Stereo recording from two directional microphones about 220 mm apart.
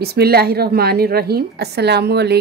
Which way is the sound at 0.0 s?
45° right (ahead or behind).